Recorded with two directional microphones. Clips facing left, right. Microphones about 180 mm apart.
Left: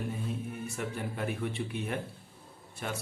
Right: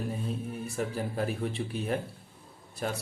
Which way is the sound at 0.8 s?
35° right (ahead or behind).